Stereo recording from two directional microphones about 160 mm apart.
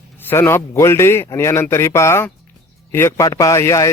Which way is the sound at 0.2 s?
15° left (ahead or behind).